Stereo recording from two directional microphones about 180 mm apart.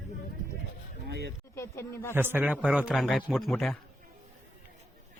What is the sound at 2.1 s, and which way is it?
A man's voice, 10° right (ahead or behind).